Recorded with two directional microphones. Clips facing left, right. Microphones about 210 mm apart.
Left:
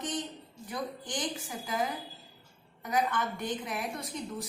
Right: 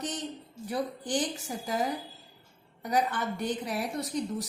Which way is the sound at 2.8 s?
40° right (ahead or behind).